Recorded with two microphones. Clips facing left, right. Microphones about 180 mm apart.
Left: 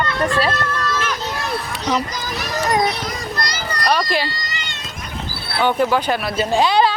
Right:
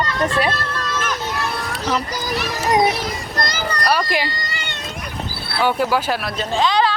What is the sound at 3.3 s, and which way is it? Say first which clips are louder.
Children playing: right 2 dB; 50° right (ahead or behind).